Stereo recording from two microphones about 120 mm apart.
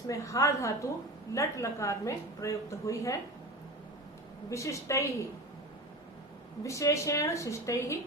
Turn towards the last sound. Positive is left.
turn(degrees=25)  # may be behind; listen again after turning